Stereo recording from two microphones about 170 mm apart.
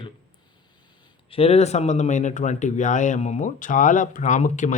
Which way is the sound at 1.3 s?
35° left (ahead or behind).